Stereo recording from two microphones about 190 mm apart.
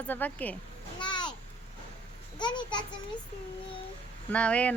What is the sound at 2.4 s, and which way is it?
Speech, 25° left (ahead or behind).